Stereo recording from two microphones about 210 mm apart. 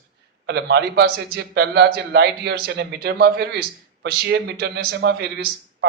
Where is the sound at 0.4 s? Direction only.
55° right (ahead or behind).